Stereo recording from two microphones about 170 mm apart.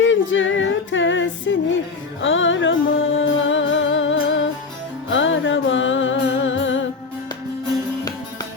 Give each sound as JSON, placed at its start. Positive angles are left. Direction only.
{"t": 0.1, "sound": "music", "side_deg": 90}